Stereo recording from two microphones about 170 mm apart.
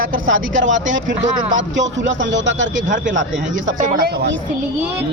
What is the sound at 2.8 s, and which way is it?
Speech, 50° right (ahead or behind).